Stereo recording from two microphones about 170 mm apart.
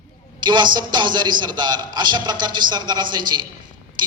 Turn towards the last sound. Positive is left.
turn(degrees=-25)  # may be behind; listen again after turning